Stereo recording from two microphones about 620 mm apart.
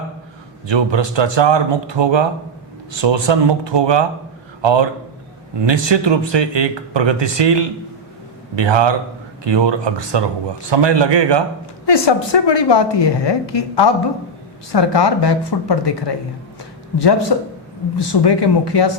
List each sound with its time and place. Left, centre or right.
0.7 s speech: right
11.9 s a woman's voice: left